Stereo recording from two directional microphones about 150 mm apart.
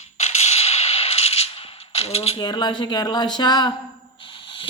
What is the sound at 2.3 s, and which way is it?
Speech, 30° left (ahead or behind).